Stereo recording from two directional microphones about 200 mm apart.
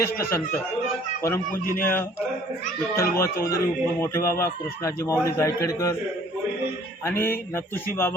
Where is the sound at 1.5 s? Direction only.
45° left (ahead or behind).